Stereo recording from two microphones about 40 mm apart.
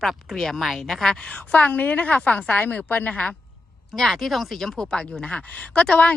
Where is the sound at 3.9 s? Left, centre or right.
Centre.